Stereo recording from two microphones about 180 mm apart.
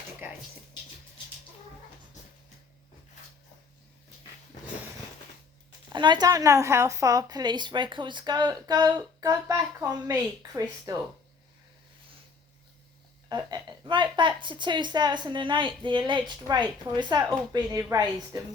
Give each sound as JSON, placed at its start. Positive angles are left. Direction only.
{"t": 5.9, "sound": "a woman's voice", "side_deg": -25}
{"t": 13.2, "sound": "a woman's voice", "side_deg": -20}